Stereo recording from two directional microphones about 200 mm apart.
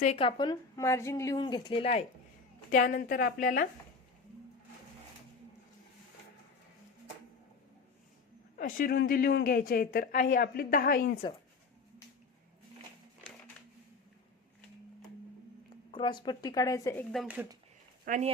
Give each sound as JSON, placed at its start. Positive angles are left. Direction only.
{"t": 0.0, "sound": "speech", "side_deg": 30}
{"t": 2.7, "sound": "a woman's voice", "side_deg": 40}
{"t": 8.5, "sound": "a woman's voice", "side_deg": 45}
{"t": 11.2, "sound": "speech", "side_deg": 25}
{"t": 15.9, "sound": "speech", "side_deg": 25}
{"t": 17.1, "sound": "speech", "side_deg": -5}
{"t": 18.0, "sound": "speech", "side_deg": -40}